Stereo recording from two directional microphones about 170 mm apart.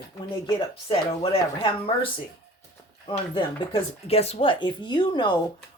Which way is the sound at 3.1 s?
30° left (ahead or behind).